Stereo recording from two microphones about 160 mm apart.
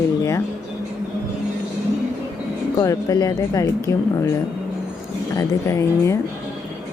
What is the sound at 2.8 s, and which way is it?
Speech, 20° left (ahead or behind).